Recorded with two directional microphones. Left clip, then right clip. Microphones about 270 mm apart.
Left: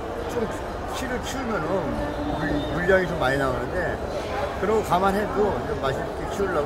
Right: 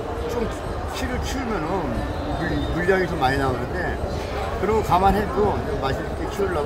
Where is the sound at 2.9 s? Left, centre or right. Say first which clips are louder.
Even; centre.